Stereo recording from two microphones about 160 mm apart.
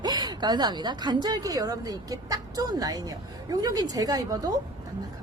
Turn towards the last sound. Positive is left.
turn(degrees=-20)  # may be behind; listen again after turning